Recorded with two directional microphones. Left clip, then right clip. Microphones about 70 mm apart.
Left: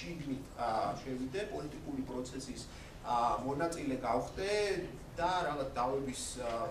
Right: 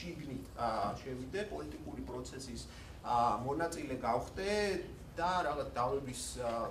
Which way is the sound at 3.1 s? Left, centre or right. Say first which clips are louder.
Even; centre.